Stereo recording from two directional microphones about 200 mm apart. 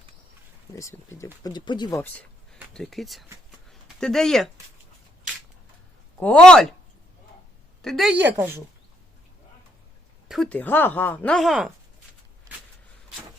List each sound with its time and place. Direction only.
0.8 s a woman's voice: 15° left (ahead or behind)
3.7 s a sound: centre (ahead or behind)
6.1 s a woman's voice: 5° left (ahead or behind)
7.8 s a woman's voice: centre (ahead or behind)
10.2 s speech: centre (ahead or behind)